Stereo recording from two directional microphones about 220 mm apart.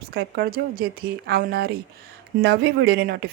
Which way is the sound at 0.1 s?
45° right (ahead or behind).